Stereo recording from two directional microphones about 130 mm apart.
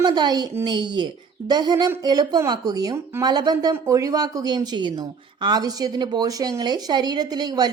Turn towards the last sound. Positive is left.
turn(degrees=-30)  # may be behind; listen again after turning